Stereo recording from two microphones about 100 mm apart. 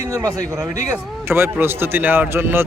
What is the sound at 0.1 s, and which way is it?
Speech, 35° right (ahead or behind).